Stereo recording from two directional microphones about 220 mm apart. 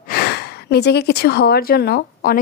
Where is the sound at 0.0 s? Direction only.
45° left (ahead or behind).